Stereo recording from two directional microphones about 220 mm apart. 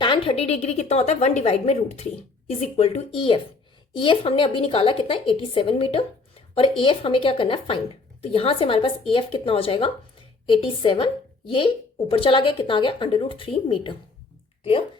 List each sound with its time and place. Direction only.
0.0 s a woman's voice: 25° left (ahead or behind)
12.1 s a woman's voice: 25° left (ahead or behind)